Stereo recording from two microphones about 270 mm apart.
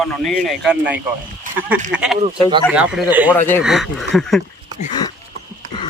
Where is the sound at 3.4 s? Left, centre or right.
Centre.